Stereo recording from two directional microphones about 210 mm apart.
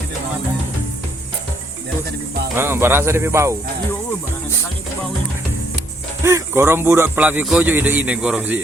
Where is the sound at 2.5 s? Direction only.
10° right (ahead or behind).